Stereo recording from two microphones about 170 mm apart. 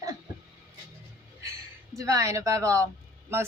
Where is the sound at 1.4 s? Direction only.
20° right (ahead or behind).